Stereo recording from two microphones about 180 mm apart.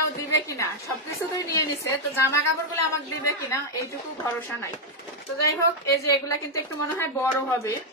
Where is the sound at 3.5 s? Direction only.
15° left (ahead or behind).